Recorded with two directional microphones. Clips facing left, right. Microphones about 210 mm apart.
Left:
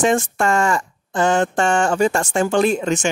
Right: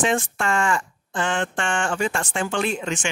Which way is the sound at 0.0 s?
45° left (ahead or behind).